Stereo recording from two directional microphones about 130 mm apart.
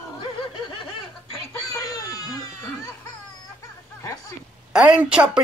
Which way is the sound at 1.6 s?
25° left (ahead or behind).